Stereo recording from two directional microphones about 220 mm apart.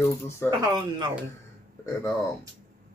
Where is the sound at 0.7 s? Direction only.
20° right (ahead or behind).